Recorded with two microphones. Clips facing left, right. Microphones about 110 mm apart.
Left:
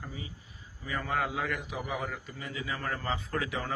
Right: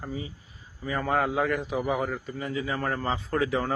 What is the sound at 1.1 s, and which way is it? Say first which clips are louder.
Speech: right 6 dB; 50° right (ahead or behind).